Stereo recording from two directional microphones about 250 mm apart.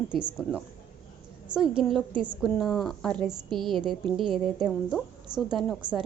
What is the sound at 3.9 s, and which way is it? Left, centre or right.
A woman's voice, centre.